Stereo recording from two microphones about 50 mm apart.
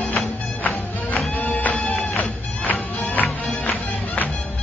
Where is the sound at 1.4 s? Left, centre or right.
Left.